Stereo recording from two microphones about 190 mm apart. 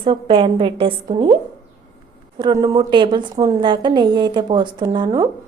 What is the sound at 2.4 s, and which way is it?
A woman's voice, 20° right (ahead or behind).